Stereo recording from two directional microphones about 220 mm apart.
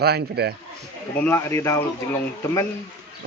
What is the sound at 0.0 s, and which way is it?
Speech, 45° right (ahead or behind).